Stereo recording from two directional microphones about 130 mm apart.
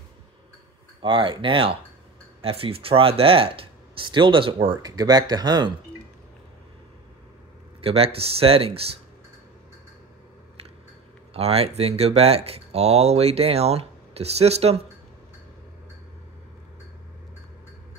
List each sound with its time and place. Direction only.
1.0 s speech: 40° right (ahead or behind)
4.9 s speech: 30° right (ahead or behind)
7.8 s speech: 50° right (ahead or behind)
11.3 s speech: 50° right (ahead or behind)